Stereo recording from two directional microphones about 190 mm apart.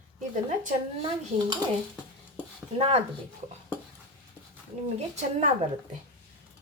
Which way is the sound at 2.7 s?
30° right (ahead or behind).